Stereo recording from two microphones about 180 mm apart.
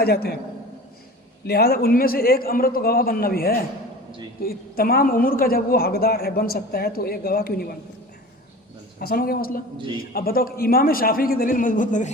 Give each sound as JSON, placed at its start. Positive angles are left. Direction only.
{"t": 0.0, "sound": "a woman's voice", "side_deg": 60}
{"t": 1.5, "sound": "a woman's voice", "side_deg": 60}
{"t": 9.0, "sound": "a woman's voice", "side_deg": 55}